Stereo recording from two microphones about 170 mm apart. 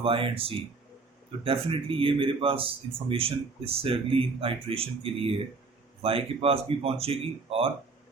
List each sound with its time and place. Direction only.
0.0 s a man's voice: 30° right (ahead or behind)